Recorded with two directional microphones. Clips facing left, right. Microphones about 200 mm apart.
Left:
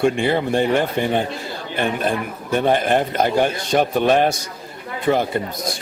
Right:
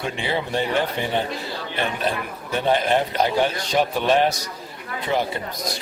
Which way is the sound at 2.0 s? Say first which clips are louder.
Left 4 dB; 50° left (ahead or behind).